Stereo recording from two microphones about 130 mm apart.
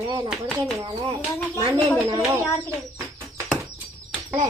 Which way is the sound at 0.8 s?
40° right (ahead or behind).